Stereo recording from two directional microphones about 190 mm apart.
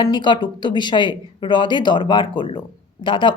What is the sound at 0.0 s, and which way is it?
Speech, 25° left (ahead or behind).